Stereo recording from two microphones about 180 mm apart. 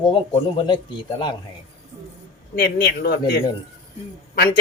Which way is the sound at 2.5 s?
55° left (ahead or behind).